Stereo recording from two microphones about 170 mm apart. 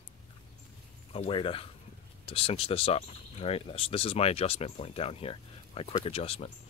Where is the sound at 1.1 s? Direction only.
35° left (ahead or behind).